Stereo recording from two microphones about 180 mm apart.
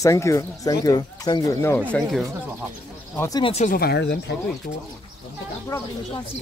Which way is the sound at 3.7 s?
65° left (ahead or behind).